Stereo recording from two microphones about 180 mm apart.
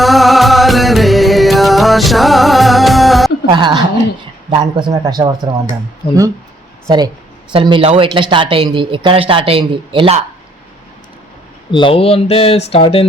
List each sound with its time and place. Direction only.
0.0 s music: centre (ahead or behind)
3.4 s a woman's voice: 25° right (ahead or behind)
6.0 s speech: 60° left (ahead or behind)
6.8 s speech: 20° right (ahead or behind)
11.7 s speech: 30° left (ahead or behind)